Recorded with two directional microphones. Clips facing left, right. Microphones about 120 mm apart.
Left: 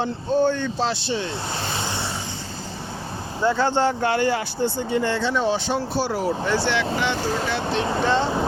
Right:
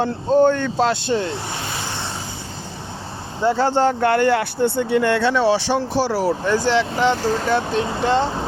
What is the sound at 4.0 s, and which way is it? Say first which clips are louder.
Speech: right 5 dB; 55° right (ahead or behind).